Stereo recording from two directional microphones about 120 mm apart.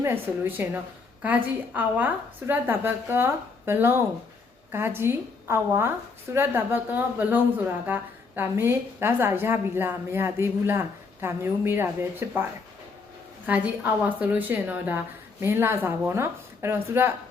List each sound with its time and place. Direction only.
0.0 s a woman's voice: 15° right (ahead or behind)
13.5 s a woman's voice: 10° right (ahead or behind)